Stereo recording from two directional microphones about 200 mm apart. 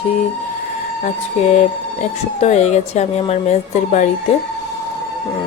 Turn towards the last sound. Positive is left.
turn(degrees=35)  # may be behind; listen again after turning